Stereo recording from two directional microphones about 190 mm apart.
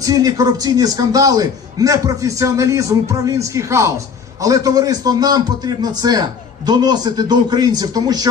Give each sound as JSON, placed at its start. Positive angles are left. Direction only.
{"t": 0.0, "sound": "a man's voice", "side_deg": -20}